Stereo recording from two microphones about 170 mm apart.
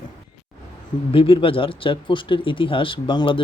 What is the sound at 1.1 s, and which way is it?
Speech, 30° left (ahead or behind).